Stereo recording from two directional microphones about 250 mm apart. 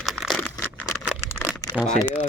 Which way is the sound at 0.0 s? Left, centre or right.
Centre.